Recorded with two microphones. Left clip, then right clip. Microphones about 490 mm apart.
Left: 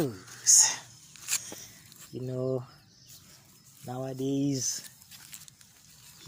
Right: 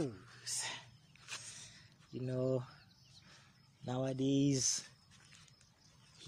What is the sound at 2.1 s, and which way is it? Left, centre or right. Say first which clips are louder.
Speech: left 5 dB; right.